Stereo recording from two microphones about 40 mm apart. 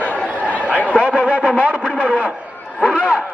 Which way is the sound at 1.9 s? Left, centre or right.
Left.